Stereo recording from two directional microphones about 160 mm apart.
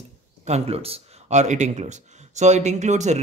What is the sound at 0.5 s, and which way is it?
Speech, 40° right (ahead or behind).